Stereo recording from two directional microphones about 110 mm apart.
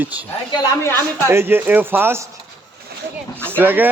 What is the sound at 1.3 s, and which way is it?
Speech, 20° right (ahead or behind).